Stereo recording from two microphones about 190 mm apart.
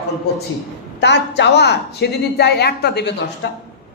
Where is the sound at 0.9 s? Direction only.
65° left (ahead or behind).